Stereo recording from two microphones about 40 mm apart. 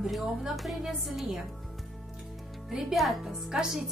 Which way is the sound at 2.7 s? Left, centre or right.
Centre.